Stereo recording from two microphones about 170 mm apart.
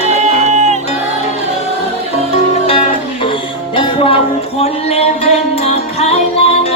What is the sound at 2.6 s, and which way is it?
Music, 35° left (ahead or behind).